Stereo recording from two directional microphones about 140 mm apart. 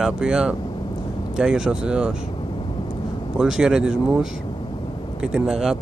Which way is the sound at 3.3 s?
5° right (ahead or behind).